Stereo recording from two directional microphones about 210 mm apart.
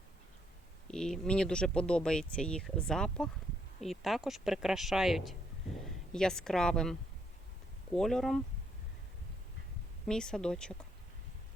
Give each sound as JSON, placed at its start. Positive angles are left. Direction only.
{"t": 0.9, "sound": "speech", "side_deg": 5}
{"t": 7.9, "sound": "speech", "side_deg": 0}
{"t": 10.1, "sound": "speech", "side_deg": 5}